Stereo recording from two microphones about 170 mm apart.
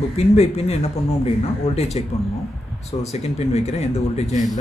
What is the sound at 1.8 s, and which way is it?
Speech, 40° left (ahead or behind).